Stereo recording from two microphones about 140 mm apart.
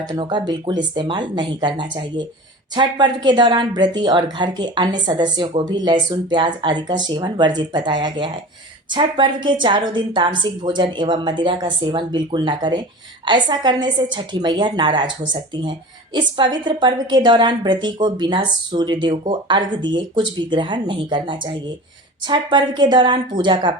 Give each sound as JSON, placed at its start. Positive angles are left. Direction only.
{"t": 0.1, "sound": "a woman's voice", "side_deg": -35}
{"t": 16.1, "sound": "a woman's voice", "side_deg": -35}